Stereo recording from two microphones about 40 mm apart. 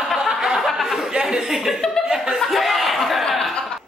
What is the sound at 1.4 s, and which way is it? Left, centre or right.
Speech, centre.